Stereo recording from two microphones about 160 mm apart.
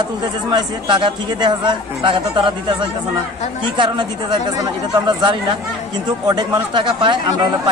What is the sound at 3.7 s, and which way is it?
Speech, 25° right (ahead or behind).